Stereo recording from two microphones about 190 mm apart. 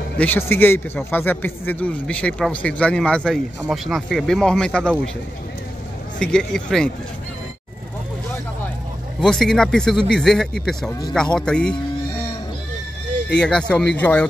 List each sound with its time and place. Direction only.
0.2 s a man's voice: 10° left (ahead or behind)
6.1 s a man's voice: 5° left (ahead or behind)
9.2 s a man's voice: centre (ahead or behind)
10.9 s speech: 20° left (ahead or behind)
11.3 s a man's voice: 5° left (ahead or behind)
13.4 s a man's voice: 5° left (ahead or behind)